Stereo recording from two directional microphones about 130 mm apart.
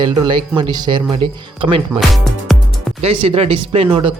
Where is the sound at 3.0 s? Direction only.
45° right (ahead or behind).